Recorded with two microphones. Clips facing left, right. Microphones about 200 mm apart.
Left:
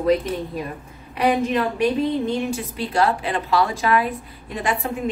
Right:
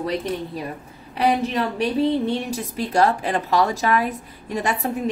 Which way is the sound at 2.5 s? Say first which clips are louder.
Right 1 dB; 40° right (ahead or behind).